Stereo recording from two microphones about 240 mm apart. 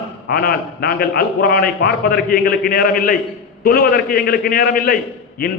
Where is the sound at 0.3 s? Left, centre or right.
Left.